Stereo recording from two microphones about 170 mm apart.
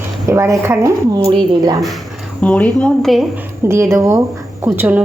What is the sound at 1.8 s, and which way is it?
Speech, centre (ahead or behind).